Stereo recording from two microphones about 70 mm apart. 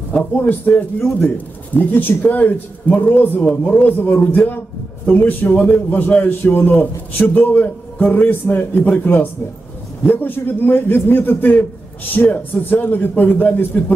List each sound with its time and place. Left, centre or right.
0.1 s a man's voice: centre